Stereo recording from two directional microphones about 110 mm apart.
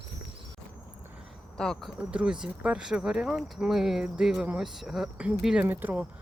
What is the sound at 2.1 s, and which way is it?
Speech, 10° right (ahead or behind).